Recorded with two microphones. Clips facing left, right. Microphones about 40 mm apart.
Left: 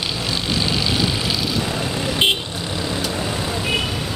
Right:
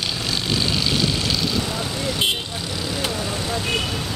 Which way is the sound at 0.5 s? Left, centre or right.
Centre.